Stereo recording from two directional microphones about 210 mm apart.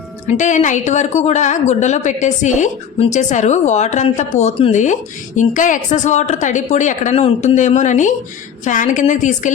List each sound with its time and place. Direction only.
0.3 s a woman's voice: 35° left (ahead or behind)